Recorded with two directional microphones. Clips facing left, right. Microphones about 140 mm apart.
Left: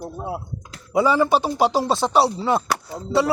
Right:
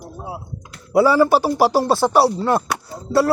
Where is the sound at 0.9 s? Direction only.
5° right (ahead or behind).